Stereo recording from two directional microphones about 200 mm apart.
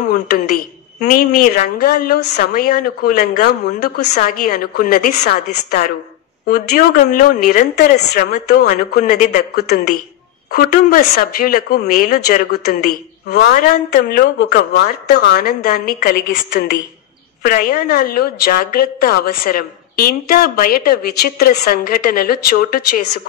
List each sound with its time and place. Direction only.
0.1 s a woman's voice: 50° left (ahead or behind)
3.4 s a woman's voice: 55° left (ahead or behind)
7.7 s speech: 55° left (ahead or behind)
8.5 s a woman's voice: 40° left (ahead or behind)
12.3 s a woman's voice: 50° left (ahead or behind)
13.4 s a woman's voice: 40° left (ahead or behind)